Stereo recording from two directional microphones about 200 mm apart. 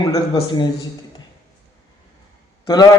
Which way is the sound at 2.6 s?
20° left (ahead or behind).